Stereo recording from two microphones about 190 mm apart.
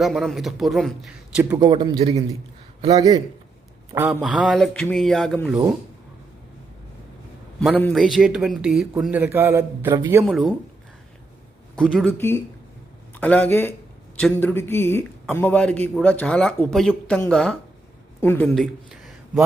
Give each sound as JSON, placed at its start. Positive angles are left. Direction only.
{"t": 0.0, "sound": "speech", "side_deg": 0}
{"t": 1.5, "sound": "a man's voice", "side_deg": -25}
{"t": 3.9, "sound": "speech", "side_deg": -5}
{"t": 7.8, "sound": "speech", "side_deg": 5}
{"t": 10.2, "sound": "speech", "side_deg": 0}
{"t": 11.8, "sound": "speech", "side_deg": 5}